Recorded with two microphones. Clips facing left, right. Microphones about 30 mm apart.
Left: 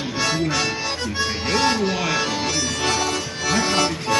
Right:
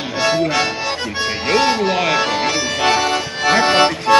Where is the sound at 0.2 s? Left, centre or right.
Centre.